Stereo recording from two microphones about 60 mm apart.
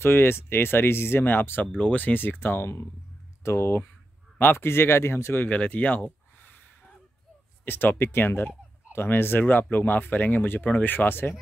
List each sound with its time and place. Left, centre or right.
0.0 s speech: left
1.8 s speech: left
5.5 s a sound: left
7.6 s speech: left